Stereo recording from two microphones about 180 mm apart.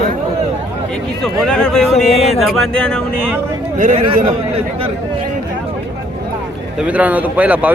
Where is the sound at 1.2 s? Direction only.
5° left (ahead or behind).